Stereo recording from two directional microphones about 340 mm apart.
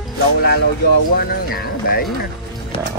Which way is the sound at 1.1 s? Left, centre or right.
Left.